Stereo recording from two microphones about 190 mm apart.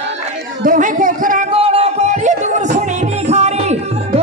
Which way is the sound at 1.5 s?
30° right (ahead or behind).